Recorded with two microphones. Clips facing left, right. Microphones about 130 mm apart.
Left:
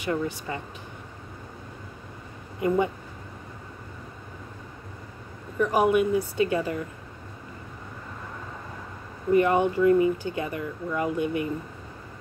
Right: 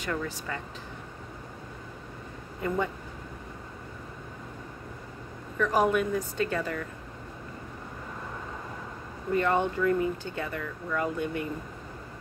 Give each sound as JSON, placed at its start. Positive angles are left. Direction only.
{"t": 0.0, "sound": "speech", "side_deg": 20}
{"t": 2.6, "sound": "speech", "side_deg": 10}
{"t": 5.6, "sound": "speech", "side_deg": 10}
{"t": 9.3, "sound": "speech", "side_deg": 10}